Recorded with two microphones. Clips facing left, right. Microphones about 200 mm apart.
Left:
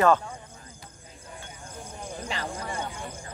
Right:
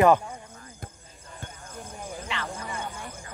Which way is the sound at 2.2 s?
35° left (ahead or behind).